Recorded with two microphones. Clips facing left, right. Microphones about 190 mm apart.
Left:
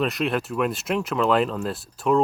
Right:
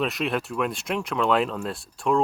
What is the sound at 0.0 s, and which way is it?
Speech, centre (ahead or behind).